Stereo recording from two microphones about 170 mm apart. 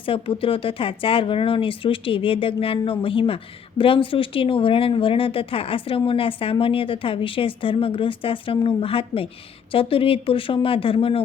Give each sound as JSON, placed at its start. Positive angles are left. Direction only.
{"t": 0.0, "sound": "speech", "side_deg": 30}